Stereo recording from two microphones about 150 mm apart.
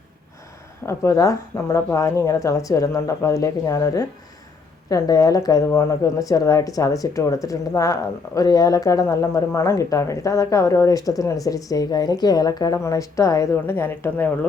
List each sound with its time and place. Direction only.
0.9 s speech: 20° left (ahead or behind)